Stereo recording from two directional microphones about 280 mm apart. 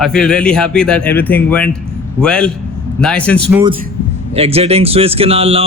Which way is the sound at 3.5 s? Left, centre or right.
Centre.